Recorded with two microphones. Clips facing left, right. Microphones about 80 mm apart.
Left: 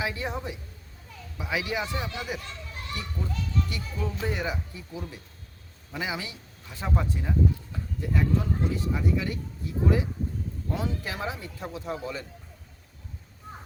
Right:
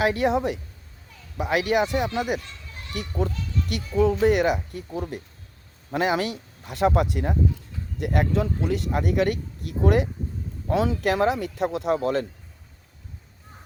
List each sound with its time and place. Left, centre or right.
0.0 s speech: right
1.4 s speech: right
3.7 s speech: right
5.9 s speech: right
10.7 s speech: right